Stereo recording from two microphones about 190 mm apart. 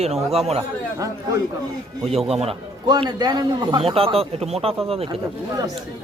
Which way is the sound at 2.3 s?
30° right (ahead or behind).